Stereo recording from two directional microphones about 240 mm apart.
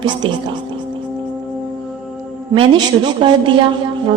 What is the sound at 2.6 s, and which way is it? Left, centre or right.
Speech, right.